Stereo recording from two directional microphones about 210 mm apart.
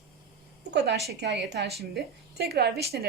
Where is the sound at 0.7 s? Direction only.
55° right (ahead or behind).